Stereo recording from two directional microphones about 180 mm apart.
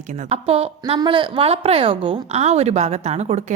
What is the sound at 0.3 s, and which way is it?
A woman's voice, 35° right (ahead or behind).